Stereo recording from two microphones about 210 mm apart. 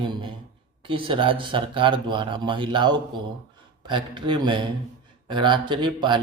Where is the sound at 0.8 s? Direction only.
25° right (ahead or behind).